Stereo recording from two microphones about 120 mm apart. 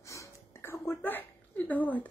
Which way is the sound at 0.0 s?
25° left (ahead or behind).